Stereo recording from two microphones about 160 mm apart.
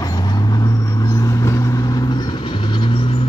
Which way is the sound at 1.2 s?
20° left (ahead or behind).